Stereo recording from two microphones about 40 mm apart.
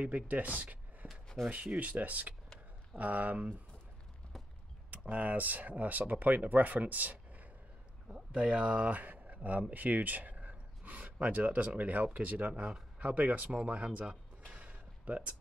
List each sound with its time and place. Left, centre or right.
0.0 s speech: right
4.9 s speech: right
8.1 s speech: right
8.8 s speech: right
14.5 s a sound: right